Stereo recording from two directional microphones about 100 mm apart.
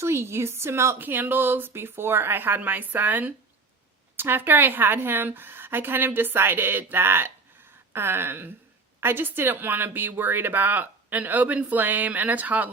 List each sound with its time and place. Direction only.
0.0 s a woman's voice: 25° right (ahead or behind)